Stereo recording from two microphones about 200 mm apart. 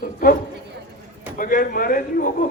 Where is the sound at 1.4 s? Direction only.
45° left (ahead or behind).